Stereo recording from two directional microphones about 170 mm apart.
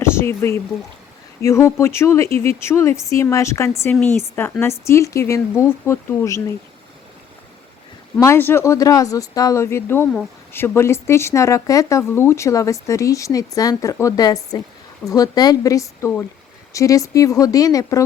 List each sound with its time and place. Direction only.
0.0 s speech: 15° left (ahead or behind)
8.2 s speech: 15° left (ahead or behind)